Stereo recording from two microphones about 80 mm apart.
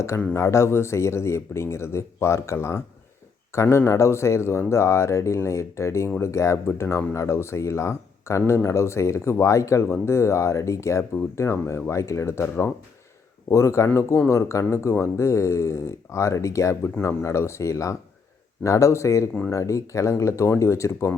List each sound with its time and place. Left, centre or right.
0.3 s speech: left